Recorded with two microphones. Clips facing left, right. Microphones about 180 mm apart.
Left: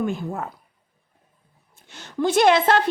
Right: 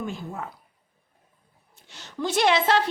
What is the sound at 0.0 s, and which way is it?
Speech, 55° left (ahead or behind).